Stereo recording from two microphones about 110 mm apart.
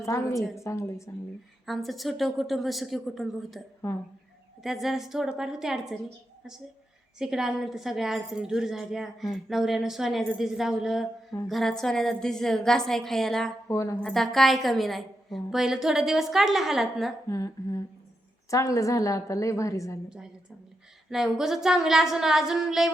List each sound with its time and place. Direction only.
0.0 s a woman's voice: 25° left (ahead or behind)
1.6 s a woman's voice: centre (ahead or behind)
4.6 s a woman's voice: centre (ahead or behind)
7.2 s a woman's voice: 5° right (ahead or behind)
13.7 s a woman's voice: 30° left (ahead or behind)
14.0 s a woman's voice: 5° left (ahead or behind)
17.2 s humming: 30° left (ahead or behind)
18.5 s a woman's voice: 30° left (ahead or behind)
21.1 s a woman's voice: 5° right (ahead or behind)